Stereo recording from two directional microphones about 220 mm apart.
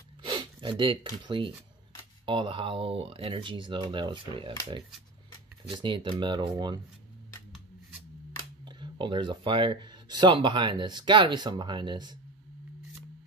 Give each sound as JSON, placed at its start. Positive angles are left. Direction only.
{"t": 0.2, "sound": "speech", "side_deg": -20}
{"t": 8.6, "sound": "speech", "side_deg": -20}